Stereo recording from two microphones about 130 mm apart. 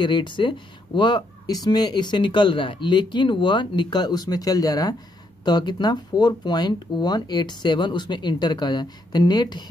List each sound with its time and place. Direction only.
0.0 s speech: 40° left (ahead or behind)